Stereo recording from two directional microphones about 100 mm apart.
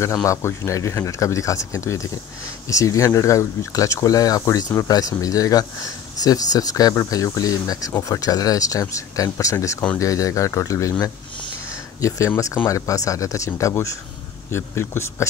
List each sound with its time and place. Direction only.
0.0 s speech: 30° left (ahead or behind)
12.6 s speech: 30° left (ahead or behind)